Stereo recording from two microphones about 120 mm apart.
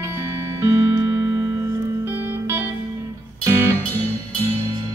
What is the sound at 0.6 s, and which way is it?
Music, 20° right (ahead or behind).